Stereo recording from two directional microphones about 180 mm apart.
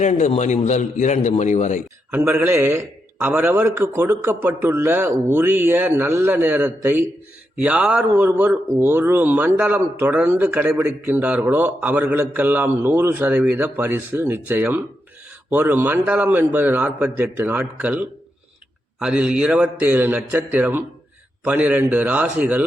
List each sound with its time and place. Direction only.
0.0 s a man's voice: 40° left (ahead or behind)
2.0 s speech: 10° right (ahead or behind)